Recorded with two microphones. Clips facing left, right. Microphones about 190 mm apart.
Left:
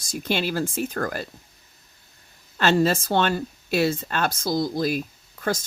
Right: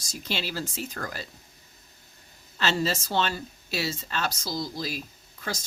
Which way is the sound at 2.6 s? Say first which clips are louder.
Left 7 dB; 55° left (ahead or behind).